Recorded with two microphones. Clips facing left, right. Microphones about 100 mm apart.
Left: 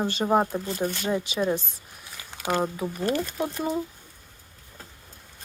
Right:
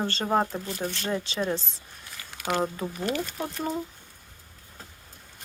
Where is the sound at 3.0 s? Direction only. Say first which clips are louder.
Left 3 dB; 40° left (ahead or behind).